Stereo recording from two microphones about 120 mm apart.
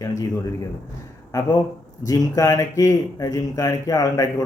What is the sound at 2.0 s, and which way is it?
Speech, 30° left (ahead or behind).